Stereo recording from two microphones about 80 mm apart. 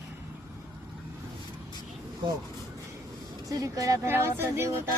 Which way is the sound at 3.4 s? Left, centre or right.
Right.